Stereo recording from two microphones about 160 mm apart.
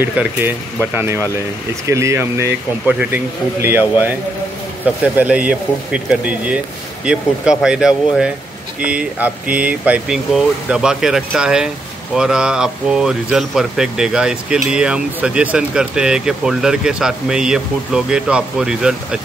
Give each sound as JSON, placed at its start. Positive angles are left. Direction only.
{"t": 0.0, "sound": "speech", "side_deg": -10}